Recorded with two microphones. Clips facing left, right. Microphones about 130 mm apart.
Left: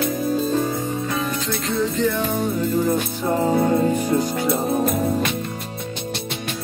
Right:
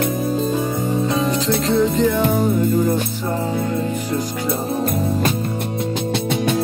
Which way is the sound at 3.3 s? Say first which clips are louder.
Left 5 dB; 35° left (ahead or behind).